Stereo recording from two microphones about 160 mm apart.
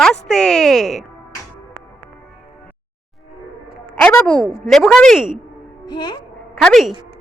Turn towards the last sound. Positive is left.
turn(degrees=0)  # may be behind; listen again after turning